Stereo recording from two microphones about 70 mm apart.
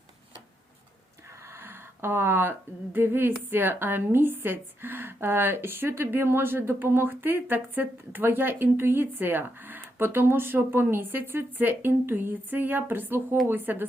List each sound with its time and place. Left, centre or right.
1.5 s speech: right